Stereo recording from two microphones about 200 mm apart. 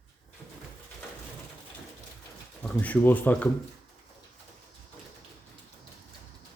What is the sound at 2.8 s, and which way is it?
Speech, 10° left (ahead or behind).